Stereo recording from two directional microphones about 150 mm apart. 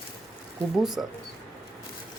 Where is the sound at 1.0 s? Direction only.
Centre (ahead or behind).